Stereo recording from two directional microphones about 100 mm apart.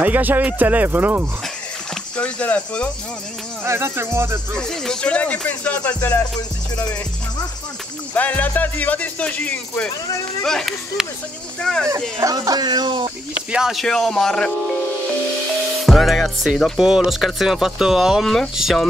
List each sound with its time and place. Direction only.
0.0 s speech: 15° right (ahead or behind)
2.1 s speech: 10° left (ahead or behind)
3.6 s insect: 25° right (ahead or behind)
4.6 s speech: 5° left (ahead or behind)
6.8 s music: 40° left (ahead or behind)
8.1 s speech: 15° left (ahead or behind)
12.2 s speech: 40° right (ahead or behind)
13.5 s speech: 5° right (ahead or behind)
15.8 s speech: centre (ahead or behind)